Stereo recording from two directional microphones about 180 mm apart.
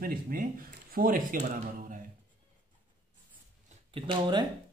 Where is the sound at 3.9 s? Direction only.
30° right (ahead or behind).